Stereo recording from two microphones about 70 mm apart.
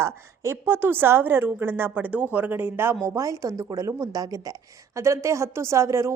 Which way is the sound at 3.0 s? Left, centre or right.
Right.